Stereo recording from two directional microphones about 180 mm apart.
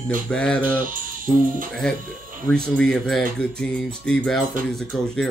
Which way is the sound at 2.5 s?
5° left (ahead or behind).